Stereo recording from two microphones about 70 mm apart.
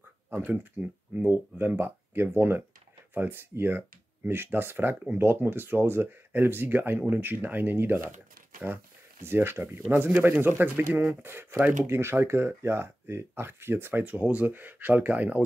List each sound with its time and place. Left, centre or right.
0.3 s speech: right
9.2 s speech: right